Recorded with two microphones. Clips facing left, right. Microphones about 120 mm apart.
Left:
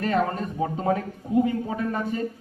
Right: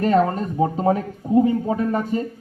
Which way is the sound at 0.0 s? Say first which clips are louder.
Right 6 dB; 35° right (ahead or behind).